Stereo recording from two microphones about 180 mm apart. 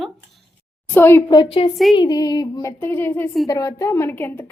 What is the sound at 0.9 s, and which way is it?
A woman's voice, 10° left (ahead or behind).